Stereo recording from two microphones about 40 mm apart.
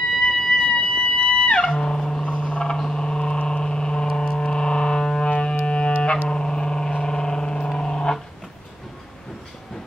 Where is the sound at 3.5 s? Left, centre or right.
Left.